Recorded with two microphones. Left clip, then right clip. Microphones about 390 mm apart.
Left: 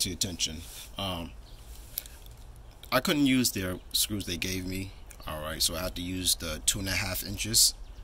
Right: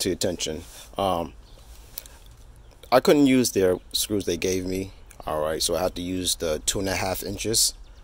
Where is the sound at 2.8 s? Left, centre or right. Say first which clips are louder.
Right 9 dB; centre.